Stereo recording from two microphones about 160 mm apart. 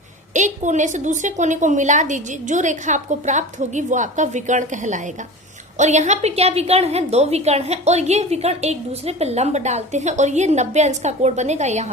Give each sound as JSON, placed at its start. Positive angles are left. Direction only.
{"t": 0.3, "sound": "a woman's voice", "side_deg": -50}